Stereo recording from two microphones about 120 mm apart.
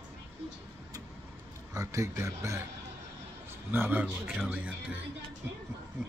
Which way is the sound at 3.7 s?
15° right (ahead or behind).